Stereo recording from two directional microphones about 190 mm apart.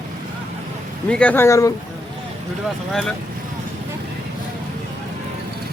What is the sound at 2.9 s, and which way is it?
Speech, centre (ahead or behind).